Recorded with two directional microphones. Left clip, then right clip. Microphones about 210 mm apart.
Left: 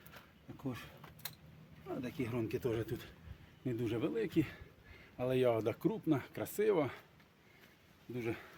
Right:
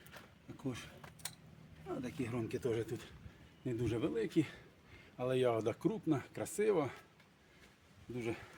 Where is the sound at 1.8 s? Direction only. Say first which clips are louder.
Left 1 dB; 25° left (ahead or behind).